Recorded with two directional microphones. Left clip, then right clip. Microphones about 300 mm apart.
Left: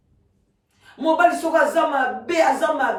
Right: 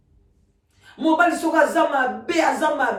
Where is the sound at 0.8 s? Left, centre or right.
Centre.